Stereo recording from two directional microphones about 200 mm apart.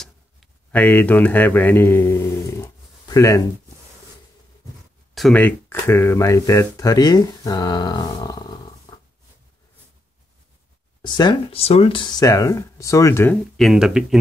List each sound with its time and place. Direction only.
0.0 s a sound: 5° left (ahead or behind)
5.1 s speech: 5° left (ahead or behind); by 9.0 s 20° left (ahead or behind)
11.0 s speech: 20° left (ahead or behind)
13.6 s speech: centre (ahead or behind)